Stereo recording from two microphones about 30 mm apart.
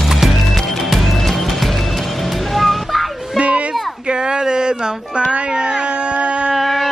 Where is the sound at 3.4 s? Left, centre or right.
Right.